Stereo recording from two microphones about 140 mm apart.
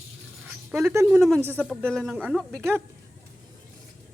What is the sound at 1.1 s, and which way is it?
A man's voice, centre (ahead or behind).